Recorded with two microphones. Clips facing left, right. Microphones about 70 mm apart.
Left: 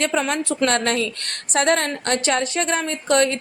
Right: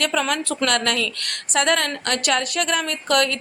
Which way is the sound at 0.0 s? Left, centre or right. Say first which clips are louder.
Left 1 dB; left.